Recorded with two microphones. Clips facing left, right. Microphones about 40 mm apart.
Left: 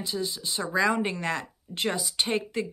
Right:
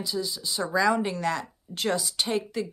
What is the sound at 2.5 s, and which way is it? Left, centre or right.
Speech, left.